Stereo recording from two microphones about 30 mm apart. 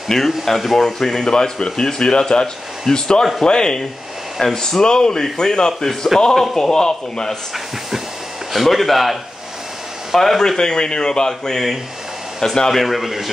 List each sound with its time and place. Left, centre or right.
0.1 s speech: centre
8.5 s a man's voice: centre
10.6 s speech: left
12.6 s a man's voice: centre